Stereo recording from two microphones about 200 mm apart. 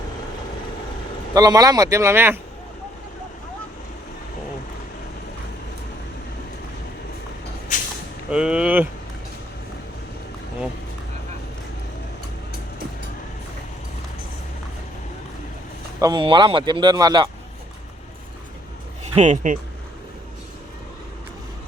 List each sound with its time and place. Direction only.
1.3 s speech: 20° right (ahead or behind)
8.3 s speech: 5° right (ahead or behind)
16.0 s speech: 20° right (ahead or behind)
19.1 s speech: 35° right (ahead or behind)